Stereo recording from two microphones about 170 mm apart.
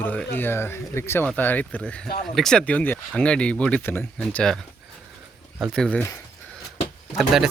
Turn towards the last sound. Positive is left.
turn(degrees=0)  # may be behind; listen again after turning